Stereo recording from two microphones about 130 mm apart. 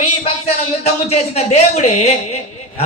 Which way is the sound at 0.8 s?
55° left (ahead or behind).